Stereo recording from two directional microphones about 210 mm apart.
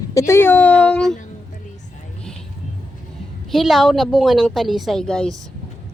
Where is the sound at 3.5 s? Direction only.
Centre (ahead or behind).